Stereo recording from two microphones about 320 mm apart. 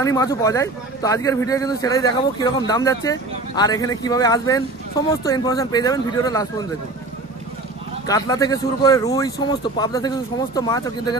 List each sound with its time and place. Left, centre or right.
0.0 s speech: centre
8.1 s speech: centre